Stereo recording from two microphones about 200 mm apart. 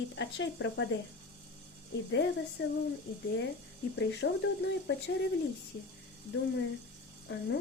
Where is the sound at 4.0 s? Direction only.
60° left (ahead or behind).